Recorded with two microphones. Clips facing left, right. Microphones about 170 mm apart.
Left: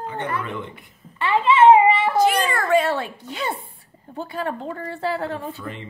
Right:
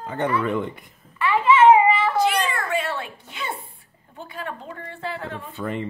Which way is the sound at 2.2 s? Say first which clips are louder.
Left 3 dB; 45° left (ahead or behind).